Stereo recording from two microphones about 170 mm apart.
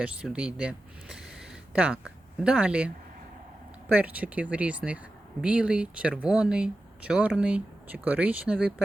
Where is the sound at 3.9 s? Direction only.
10° right (ahead or behind).